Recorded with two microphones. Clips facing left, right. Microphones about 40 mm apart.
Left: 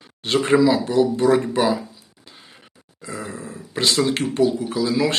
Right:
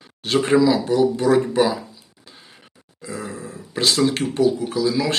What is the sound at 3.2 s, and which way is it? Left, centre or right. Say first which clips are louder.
Speech: even; left.